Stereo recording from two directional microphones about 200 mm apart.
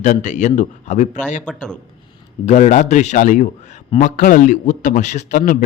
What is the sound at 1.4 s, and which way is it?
Speech, 5° left (ahead or behind).